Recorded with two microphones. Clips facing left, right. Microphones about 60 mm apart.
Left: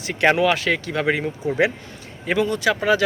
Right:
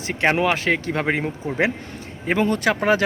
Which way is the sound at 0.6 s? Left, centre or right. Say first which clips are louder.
Right 1 dB; right.